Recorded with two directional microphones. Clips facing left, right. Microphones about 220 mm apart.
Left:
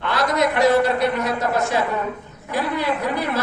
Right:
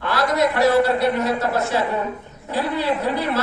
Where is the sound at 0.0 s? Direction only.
20° left (ahead or behind).